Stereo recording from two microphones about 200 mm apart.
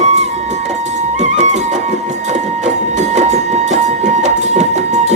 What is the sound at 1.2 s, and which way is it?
Music, 35° right (ahead or behind).